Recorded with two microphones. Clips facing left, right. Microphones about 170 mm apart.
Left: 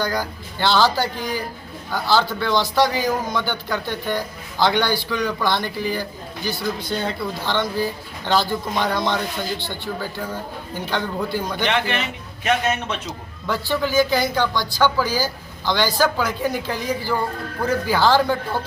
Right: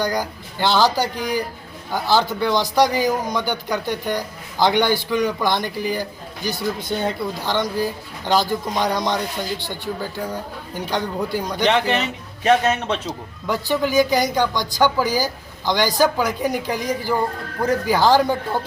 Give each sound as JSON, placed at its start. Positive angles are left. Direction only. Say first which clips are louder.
{"t": 0.0, "sound": "a man's voice", "louder": "right 1 dB", "side_deg": -20}
{"t": 11.7, "sound": "a man's voice", "louder": "right 3 dB", "side_deg": -35}
{"t": 13.5, "sound": "a man's voice", "louder": "right 2 dB", "side_deg": -15}